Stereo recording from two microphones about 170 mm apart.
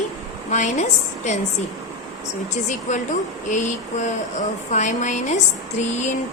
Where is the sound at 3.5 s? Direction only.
45° left (ahead or behind).